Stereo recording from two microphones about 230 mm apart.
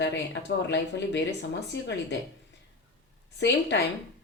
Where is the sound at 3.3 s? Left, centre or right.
Left.